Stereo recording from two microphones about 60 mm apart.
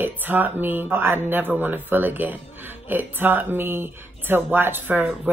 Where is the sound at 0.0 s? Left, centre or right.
Right.